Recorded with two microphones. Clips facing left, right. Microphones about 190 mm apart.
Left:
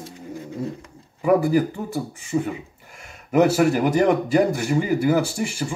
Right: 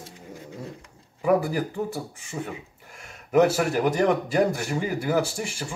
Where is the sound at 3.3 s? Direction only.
5° left (ahead or behind).